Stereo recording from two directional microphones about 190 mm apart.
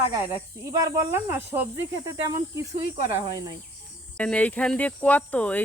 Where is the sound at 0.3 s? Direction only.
15° right (ahead or behind).